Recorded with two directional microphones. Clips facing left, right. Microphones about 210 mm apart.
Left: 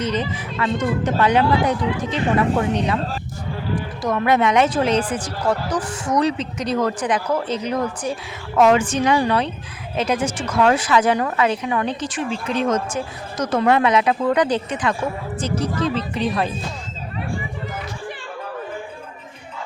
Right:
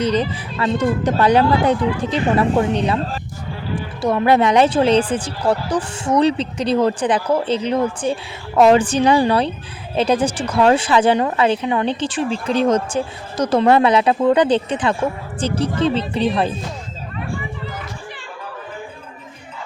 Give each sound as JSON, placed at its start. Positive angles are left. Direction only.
{"t": 0.0, "sound": "speech", "side_deg": -35}
{"t": 4.0, "sound": "speech", "side_deg": -30}